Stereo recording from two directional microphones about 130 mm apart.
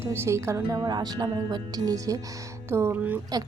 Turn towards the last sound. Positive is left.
turn(degrees=-15)  # may be behind; listen again after turning